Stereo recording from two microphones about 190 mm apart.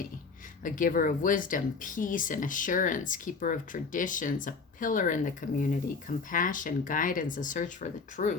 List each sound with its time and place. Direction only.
0.6 s speech: 45° left (ahead or behind)